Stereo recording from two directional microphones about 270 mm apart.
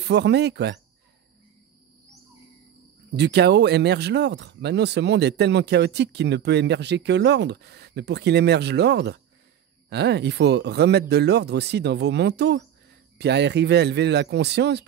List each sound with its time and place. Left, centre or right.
0.0 s speech: right
3.1 s speech: right